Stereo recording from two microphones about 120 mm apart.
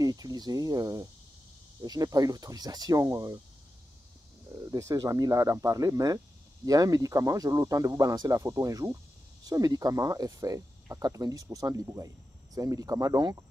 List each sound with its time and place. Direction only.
0.0 s speech: 30° right (ahead or behind)
4.6 s speech: 30° right (ahead or behind)